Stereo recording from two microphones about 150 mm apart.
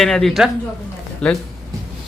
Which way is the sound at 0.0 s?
5° left (ahead or behind).